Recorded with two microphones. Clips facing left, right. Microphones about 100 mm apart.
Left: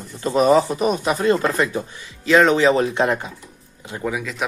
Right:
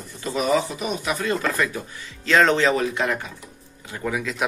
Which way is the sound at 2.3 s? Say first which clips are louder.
Left 4 dB; 10° left (ahead or behind).